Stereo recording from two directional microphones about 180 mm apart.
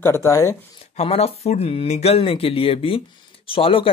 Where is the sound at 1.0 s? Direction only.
35° left (ahead or behind).